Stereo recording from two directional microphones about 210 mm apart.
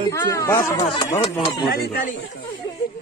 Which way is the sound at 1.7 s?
45° left (ahead or behind).